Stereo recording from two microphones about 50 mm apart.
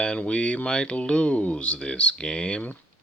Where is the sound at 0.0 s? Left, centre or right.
Centre.